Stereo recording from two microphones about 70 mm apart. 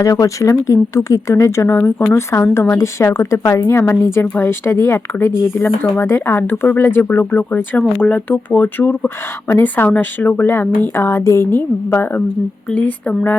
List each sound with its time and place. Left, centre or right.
0.0 s speech: left
1.8 s speech: left
2.4 s a woman's voice: left
11.5 s speech: left